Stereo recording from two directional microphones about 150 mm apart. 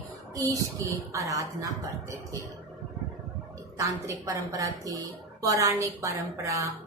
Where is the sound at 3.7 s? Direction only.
20° right (ahead or behind).